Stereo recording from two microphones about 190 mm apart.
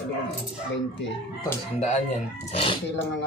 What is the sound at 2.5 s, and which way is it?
Speech, 30° left (ahead or behind).